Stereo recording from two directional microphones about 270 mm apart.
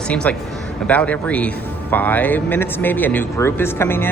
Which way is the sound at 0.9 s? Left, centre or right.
Centre.